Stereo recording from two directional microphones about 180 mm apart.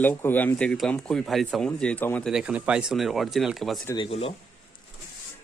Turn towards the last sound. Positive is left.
turn(degrees=30)  # may be behind; listen again after turning